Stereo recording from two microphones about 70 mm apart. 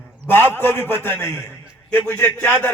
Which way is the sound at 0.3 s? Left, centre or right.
Left.